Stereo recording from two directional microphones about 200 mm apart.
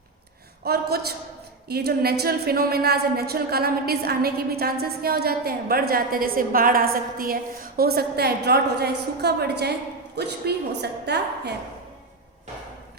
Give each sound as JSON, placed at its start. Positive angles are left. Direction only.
{"t": 0.6, "sound": "a woman's voice", "side_deg": -50}